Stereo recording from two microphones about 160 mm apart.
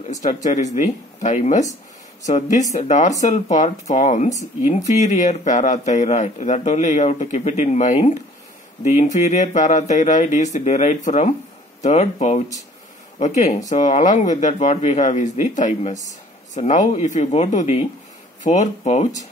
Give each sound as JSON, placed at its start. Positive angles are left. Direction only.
{"t": 0.1, "sound": "speech", "side_deg": 50}